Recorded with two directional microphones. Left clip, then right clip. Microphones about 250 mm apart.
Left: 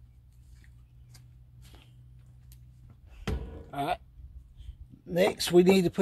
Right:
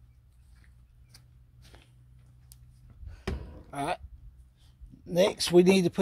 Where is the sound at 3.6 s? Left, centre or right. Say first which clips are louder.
Left 1 dB; right.